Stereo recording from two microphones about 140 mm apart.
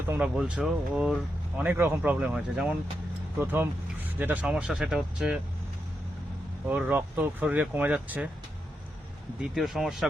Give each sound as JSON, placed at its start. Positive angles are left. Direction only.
{"t": 0.1, "sound": "speech", "side_deg": -10}
{"t": 6.7, "sound": "speech", "side_deg": -15}
{"t": 9.4, "sound": "speech", "side_deg": 0}